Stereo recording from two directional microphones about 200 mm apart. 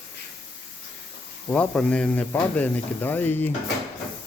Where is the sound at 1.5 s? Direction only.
5° left (ahead or behind).